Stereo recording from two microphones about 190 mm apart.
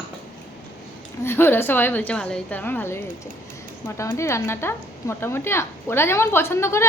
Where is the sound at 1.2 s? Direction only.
10° left (ahead or behind).